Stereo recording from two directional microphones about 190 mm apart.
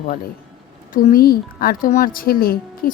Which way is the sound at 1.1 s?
50° left (ahead or behind).